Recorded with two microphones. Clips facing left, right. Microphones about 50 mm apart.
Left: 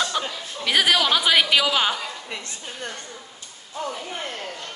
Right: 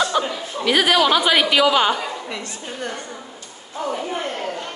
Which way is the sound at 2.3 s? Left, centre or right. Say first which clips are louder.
Right 5 dB; right.